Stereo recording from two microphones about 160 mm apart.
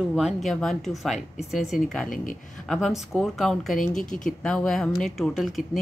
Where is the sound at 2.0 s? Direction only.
60° left (ahead or behind).